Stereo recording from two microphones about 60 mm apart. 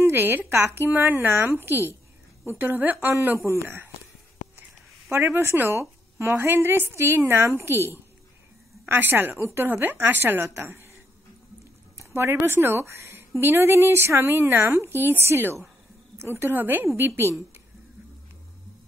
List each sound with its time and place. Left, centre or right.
0.0 s a woman's voice: right
5.1 s a woman's voice: right
8.8 s a woman's voice: right
12.1 s a woman's voice: right